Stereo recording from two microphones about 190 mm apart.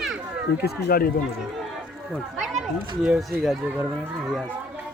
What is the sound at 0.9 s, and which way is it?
Speech, 50° left (ahead or behind).